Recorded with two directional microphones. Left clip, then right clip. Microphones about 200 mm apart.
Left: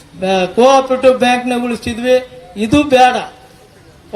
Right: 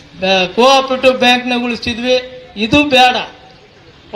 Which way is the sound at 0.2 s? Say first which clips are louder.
Even; 65° left (ahead or behind).